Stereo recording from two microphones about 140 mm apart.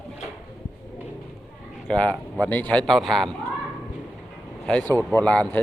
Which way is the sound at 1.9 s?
10° left (ahead or behind).